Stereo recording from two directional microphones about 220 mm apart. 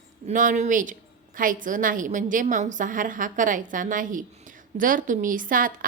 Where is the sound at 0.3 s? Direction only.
35° right (ahead or behind).